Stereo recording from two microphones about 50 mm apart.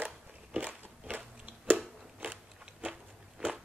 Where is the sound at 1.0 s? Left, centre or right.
Right.